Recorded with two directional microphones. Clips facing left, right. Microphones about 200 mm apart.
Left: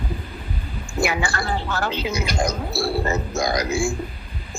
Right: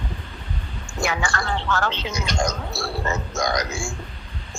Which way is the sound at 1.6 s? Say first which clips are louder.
Right 1 dB; 15° left (ahead or behind).